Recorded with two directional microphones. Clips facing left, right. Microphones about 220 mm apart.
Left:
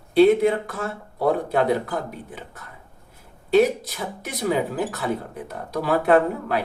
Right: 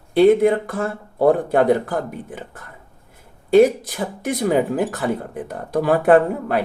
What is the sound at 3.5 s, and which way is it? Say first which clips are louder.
Speech: right 5 dB; 50° right (ahead or behind).